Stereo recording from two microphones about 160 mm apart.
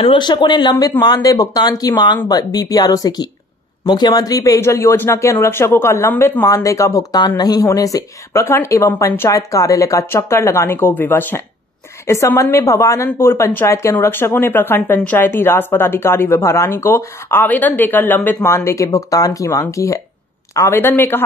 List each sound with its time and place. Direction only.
0.0 s a woman's voice: 25° left (ahead or behind)